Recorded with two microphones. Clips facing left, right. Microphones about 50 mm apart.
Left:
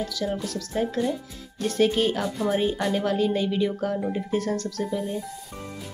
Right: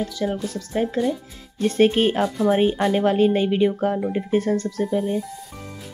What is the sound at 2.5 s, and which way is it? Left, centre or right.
Speech, right.